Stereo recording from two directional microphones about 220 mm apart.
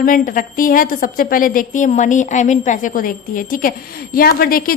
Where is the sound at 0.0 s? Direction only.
40° left (ahead or behind).